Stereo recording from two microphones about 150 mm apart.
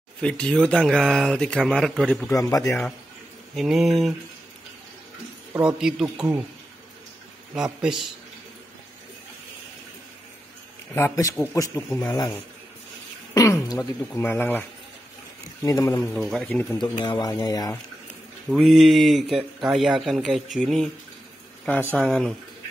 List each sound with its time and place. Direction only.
0.2 s a man's voice: 5° left (ahead or behind)
2.3 s speech: 20° left (ahead or behind)
3.5 s a man's voice: centre (ahead or behind)
5.5 s a man's voice: 5° right (ahead or behind)
7.5 s a man's voice: 5° right (ahead or behind)
11.0 s a man's voice: 20° left (ahead or behind)
13.3 s speech: 20° left (ahead or behind)
15.6 s speech: 20° left (ahead or behind)
16.2 s a man's voice: centre (ahead or behind)
16.4 s a man's voice: 10° left (ahead or behind)
16.7 s speech: 30° left (ahead or behind)
18.5 s a man's voice: centre (ahead or behind)
21.9 s a man's voice: centre (ahead or behind)